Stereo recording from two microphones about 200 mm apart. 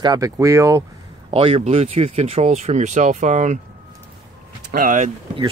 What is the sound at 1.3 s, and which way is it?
Speech, 30° right (ahead or behind).